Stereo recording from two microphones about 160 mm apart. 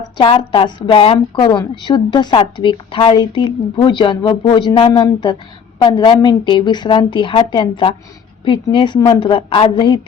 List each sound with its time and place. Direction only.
0.2 s a woman's voice: 30° left (ahead or behind)